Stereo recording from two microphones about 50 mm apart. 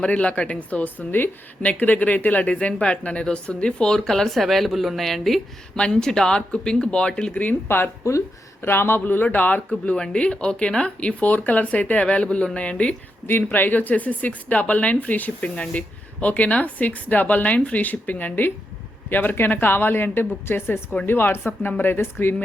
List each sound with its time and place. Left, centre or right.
0.0 s speech: left; by 5.4 s centre
5.7 s speech: centre
7.3 s speech: left
8.6 s a woman's voice: left
9.2 s speech: left
9.6 s speech: centre
11.1 s speech: left
13.2 s a woman's voice: left